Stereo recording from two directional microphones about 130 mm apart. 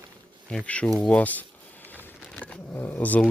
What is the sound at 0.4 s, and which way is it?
Speech, 10° left (ahead or behind).